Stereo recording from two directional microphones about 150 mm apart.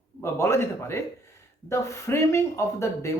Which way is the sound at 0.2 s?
15° left (ahead or behind).